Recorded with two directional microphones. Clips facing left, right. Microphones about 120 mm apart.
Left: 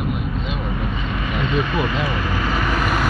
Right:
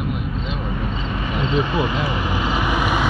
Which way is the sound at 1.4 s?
25° right (ahead or behind).